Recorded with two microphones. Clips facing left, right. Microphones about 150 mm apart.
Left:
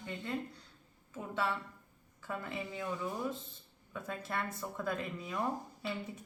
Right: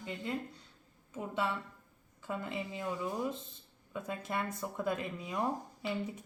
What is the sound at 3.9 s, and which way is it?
A woman's voice, 15° right (ahead or behind).